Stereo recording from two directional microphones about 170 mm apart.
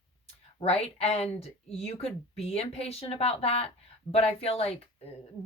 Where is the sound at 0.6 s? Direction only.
40° left (ahead or behind).